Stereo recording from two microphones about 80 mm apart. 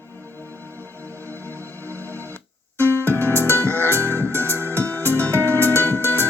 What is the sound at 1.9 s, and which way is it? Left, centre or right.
Music, right.